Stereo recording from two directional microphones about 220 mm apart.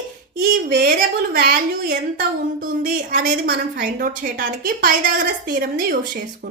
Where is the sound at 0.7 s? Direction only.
40° right (ahead or behind).